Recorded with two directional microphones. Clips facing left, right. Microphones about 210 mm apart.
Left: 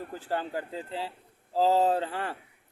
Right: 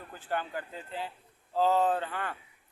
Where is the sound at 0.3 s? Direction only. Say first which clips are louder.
Left 2 dB; 30° left (ahead or behind).